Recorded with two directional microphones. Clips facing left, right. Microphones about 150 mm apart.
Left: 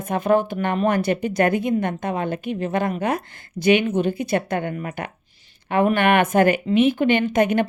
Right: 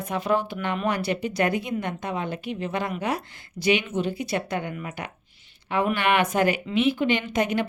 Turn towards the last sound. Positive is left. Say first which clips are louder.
# left 6 dB
turn(degrees=55)  # may be behind; listen again after turning